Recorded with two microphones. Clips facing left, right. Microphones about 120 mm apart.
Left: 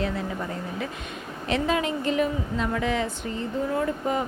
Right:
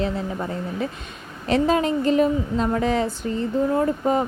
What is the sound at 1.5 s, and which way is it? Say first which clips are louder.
Speech: right 5 dB; 35° right (ahead or behind).